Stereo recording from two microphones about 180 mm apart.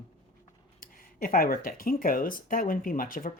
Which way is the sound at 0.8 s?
50° left (ahead or behind).